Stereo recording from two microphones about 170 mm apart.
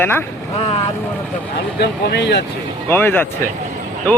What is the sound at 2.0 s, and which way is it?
Speech, 80° left.